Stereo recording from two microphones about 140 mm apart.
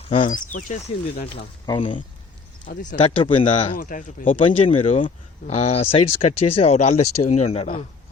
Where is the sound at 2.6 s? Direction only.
65° left (ahead or behind).